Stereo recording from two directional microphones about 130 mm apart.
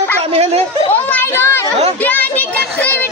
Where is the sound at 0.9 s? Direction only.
15° left (ahead or behind).